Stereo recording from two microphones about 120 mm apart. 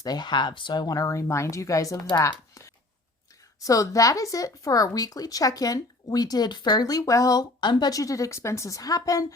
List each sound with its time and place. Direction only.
0.0 s speech: 35° left (ahead or behind)